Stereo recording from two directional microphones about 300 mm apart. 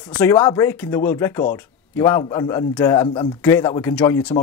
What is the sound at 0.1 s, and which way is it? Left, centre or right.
Speech, centre.